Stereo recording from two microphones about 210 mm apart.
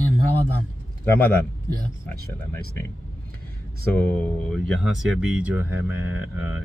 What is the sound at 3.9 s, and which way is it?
Speech, 5° left (ahead or behind).